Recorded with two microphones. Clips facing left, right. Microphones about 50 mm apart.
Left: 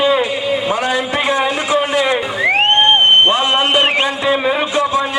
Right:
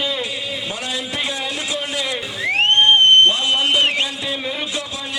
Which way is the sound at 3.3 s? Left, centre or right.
Left.